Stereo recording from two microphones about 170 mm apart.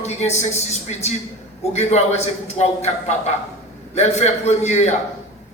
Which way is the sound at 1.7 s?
40° left (ahead or behind).